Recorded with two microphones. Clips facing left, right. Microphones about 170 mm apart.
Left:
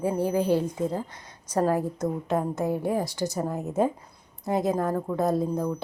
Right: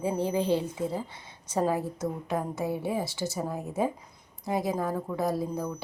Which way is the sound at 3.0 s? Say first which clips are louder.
Left 3 dB; 15° left (ahead or behind).